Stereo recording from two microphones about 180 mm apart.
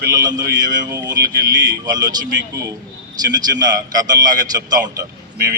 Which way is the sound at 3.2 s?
20° right (ahead or behind).